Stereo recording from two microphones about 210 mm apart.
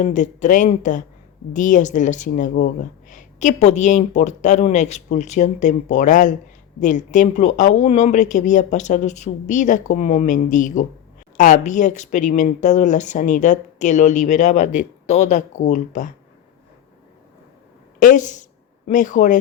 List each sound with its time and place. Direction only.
0.0 s speech: 35° left (ahead or behind)
18.0 s speech: 35° left (ahead or behind)